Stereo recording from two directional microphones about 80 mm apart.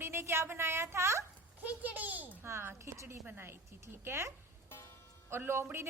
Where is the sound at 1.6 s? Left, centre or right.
Centre.